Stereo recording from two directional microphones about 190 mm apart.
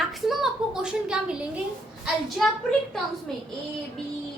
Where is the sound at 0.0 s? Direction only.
Centre (ahead or behind).